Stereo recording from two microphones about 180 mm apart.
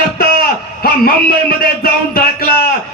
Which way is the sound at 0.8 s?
55° left (ahead or behind).